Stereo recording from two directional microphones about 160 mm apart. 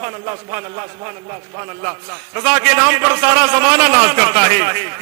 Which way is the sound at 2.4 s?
10° right (ahead or behind).